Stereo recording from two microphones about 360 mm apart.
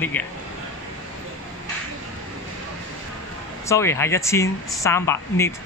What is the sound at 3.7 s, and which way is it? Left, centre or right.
Speech, centre.